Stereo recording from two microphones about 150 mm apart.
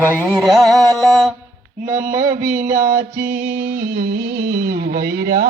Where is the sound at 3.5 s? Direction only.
70° right (ahead or behind).